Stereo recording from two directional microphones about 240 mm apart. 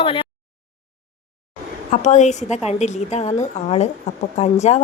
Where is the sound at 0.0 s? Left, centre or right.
Left.